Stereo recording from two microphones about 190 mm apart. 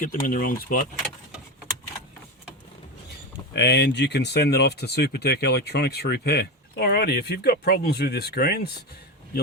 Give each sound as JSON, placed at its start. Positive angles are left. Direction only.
{"t": 0.0, "sound": "speech", "side_deg": 45}
{"t": 3.5, "sound": "speech", "side_deg": 65}